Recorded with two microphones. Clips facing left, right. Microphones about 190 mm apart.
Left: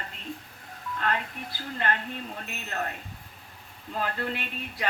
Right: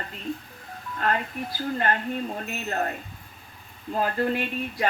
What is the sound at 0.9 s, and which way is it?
Music, 40° right (ahead or behind).